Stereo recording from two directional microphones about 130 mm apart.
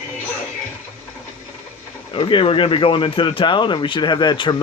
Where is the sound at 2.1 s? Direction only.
40° left (ahead or behind).